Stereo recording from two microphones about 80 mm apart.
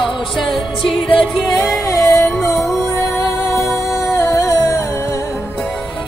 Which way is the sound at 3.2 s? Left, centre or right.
Left.